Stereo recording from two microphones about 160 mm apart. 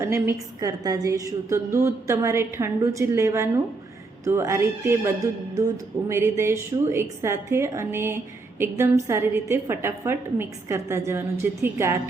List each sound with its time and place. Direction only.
0.0 s a woman's voice: 15° right (ahead or behind)